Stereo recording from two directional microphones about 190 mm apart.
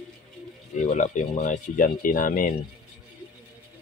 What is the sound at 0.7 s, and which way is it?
Speech, 40° left (ahead or behind).